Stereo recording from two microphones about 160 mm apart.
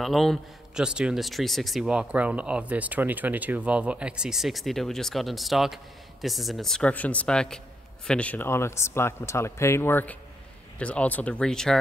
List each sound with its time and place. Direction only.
0.0 s a man's voice: centre (ahead or behind)